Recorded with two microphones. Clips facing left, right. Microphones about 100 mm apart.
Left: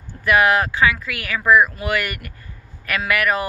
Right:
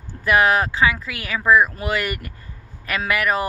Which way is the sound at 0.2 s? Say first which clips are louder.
Left 1 dB; 25° right (ahead or behind).